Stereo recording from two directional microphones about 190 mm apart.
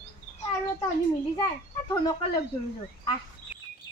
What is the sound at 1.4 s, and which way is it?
Speech, 20° left (ahead or behind).